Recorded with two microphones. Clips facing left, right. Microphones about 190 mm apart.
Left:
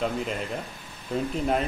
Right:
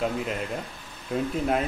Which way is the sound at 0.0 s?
5° right (ahead or behind).